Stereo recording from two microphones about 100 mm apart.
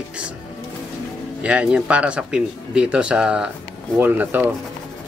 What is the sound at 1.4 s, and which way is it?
A man's voice, 10° right (ahead or behind).